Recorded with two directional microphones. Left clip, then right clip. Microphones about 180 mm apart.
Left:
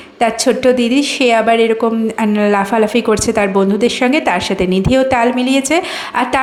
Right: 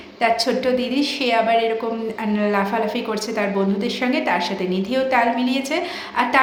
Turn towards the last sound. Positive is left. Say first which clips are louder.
# left 3 dB
turn(degrees=45)  # may be behind; listen again after turning